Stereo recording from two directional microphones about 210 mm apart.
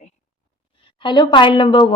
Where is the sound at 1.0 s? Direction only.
20° left (ahead or behind).